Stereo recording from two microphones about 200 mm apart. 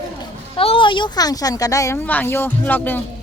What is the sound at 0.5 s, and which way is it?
Speech, 25° left (ahead or behind).